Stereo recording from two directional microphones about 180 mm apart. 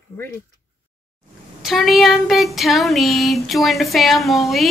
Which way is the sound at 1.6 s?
Centre (ahead or behind).